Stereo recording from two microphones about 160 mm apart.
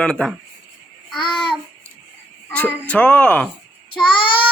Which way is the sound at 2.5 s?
10° left (ahead or behind).